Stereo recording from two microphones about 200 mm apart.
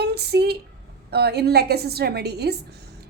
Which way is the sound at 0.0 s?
55° right (ahead or behind).